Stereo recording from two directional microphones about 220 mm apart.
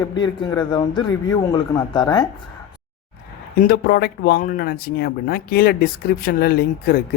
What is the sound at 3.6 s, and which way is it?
A man's voice, 45° left (ahead or behind).